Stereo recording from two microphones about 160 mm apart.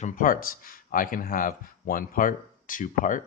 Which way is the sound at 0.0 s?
60° left (ahead or behind).